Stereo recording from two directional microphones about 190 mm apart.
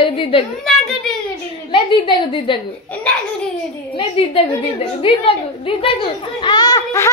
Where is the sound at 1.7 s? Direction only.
25° left (ahead or behind).